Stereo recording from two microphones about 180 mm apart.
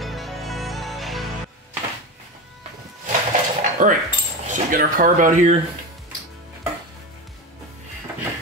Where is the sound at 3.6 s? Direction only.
45° right (ahead or behind).